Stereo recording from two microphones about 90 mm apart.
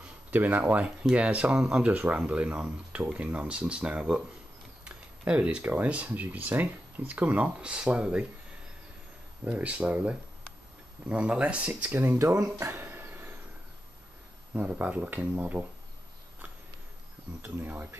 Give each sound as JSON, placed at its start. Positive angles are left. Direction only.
{"t": 0.3, "sound": "speech", "side_deg": -20}
{"t": 9.4, "sound": "speech", "side_deg": -15}
{"t": 12.2, "sound": "speech", "side_deg": -35}
{"t": 12.5, "sound": "a sound", "side_deg": -30}
{"t": 14.5, "sound": "speech", "side_deg": -20}
{"t": 17.4, "sound": "speech", "side_deg": -20}